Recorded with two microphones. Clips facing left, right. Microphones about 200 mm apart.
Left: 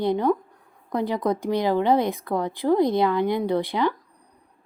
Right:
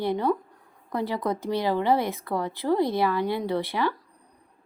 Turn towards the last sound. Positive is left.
turn(degrees=15)  # may be behind; listen again after turning